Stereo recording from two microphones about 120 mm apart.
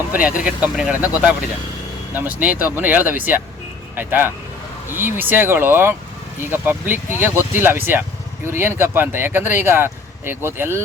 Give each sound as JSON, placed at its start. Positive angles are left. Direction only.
{"t": 0.1, "sound": "speech", "side_deg": -10}
{"t": 2.1, "sound": "speech", "side_deg": -15}